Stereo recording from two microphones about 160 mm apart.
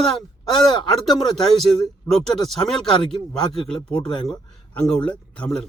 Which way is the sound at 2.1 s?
5° left (ahead or behind).